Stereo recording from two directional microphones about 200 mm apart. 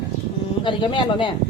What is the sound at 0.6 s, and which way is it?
Speech, 25° left (ahead or behind).